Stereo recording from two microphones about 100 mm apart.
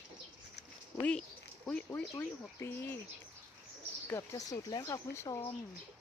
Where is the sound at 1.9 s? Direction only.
20° left (ahead or behind).